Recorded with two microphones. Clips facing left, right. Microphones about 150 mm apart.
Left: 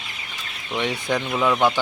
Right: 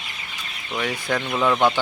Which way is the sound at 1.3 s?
Centre (ahead or behind).